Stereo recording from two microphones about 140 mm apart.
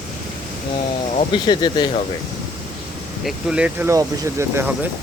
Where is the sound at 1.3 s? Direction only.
35° left (ahead or behind).